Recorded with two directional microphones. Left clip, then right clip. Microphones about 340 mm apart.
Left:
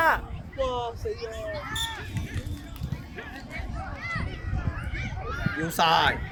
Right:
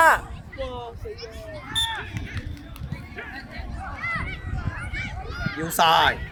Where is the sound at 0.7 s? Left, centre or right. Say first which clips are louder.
Left 5 dB; left.